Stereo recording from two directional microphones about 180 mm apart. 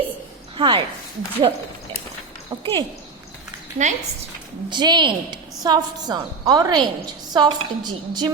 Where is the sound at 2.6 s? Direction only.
30° right (ahead or behind).